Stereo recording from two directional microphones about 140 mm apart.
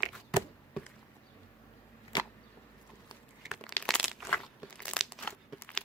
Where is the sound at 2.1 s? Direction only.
30° left (ahead or behind).